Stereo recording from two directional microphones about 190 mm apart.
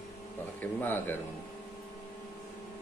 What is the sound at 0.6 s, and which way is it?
Speech, 10° left (ahead or behind).